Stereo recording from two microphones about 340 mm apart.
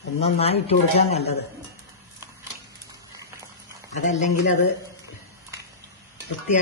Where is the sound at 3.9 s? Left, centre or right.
Left.